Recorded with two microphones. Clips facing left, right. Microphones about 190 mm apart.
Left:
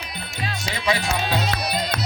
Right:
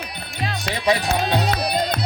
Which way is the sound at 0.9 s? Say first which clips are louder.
Right 4 dB; 35° right (ahead or behind).